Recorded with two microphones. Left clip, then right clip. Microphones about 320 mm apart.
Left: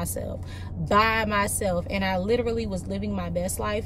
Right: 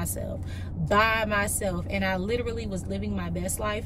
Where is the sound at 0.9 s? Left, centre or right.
Right.